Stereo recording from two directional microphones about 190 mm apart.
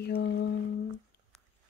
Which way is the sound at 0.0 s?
60° left (ahead or behind).